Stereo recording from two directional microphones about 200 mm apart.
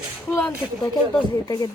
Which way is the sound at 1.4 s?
20° left (ahead or behind).